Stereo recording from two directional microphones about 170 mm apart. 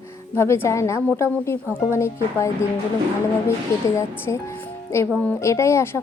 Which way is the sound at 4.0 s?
15° left (ahead or behind).